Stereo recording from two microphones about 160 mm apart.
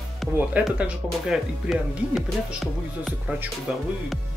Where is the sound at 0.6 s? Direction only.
5° right (ahead or behind).